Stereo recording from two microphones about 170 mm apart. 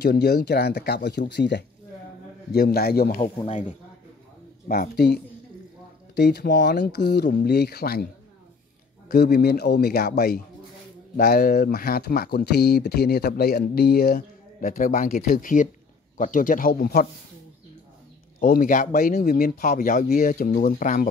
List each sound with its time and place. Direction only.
0.0 s speech: 70° left (ahead or behind)
1.3 s speech: 85° left
2.5 s speech: 65° left (ahead or behind)
3.3 s speech: 40° left (ahead or behind)
4.6 s speech: 60° left (ahead or behind)
9.1 s speech: 70° left (ahead or behind)
18.4 s speech: 55° left (ahead or behind)